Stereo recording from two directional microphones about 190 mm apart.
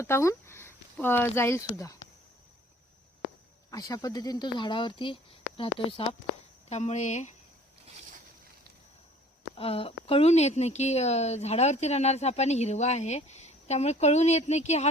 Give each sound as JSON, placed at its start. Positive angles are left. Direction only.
{"t": 0.0, "sound": "speech", "side_deg": 15}
{"t": 3.7, "sound": "speech", "side_deg": 20}
{"t": 9.6, "sound": "speech", "side_deg": 30}